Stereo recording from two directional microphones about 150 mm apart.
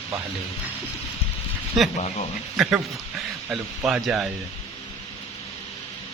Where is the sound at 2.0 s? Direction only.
45° left (ahead or behind).